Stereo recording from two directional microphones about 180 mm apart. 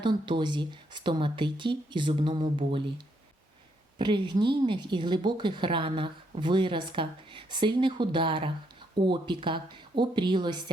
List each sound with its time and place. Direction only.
0.0 s a woman's voice: 25° right (ahead or behind)
3.9 s a woman's voice: 25° right (ahead or behind)